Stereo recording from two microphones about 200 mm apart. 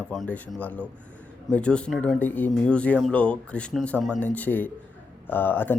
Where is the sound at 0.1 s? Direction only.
5° left (ahead or behind).